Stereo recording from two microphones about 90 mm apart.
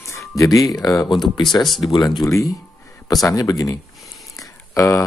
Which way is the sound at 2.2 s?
35° left (ahead or behind).